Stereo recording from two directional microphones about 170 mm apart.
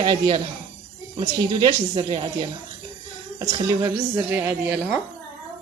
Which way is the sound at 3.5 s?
25° right (ahead or behind).